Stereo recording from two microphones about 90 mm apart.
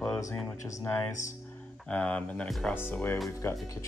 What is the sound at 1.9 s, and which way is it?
Speech, 10° left (ahead or behind).